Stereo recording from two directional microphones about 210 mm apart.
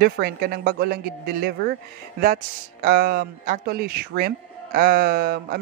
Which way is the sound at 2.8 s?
45° right (ahead or behind).